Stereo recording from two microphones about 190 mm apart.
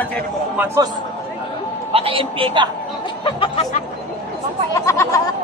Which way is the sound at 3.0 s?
25° left (ahead or behind).